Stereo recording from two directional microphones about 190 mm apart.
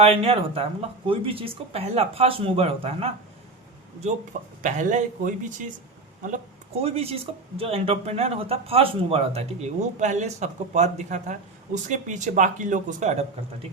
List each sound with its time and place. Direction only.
0.0 s speech: 30° right (ahead or behind)
4.0 s speech: 40° right (ahead or behind)
6.8 s speech: 30° right (ahead or behind)